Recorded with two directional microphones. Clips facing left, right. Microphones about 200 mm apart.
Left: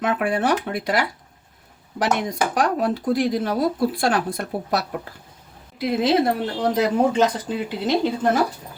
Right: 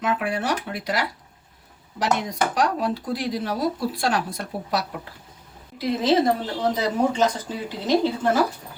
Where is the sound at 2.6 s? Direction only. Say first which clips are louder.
Left 3 dB; 50° left (ahead or behind).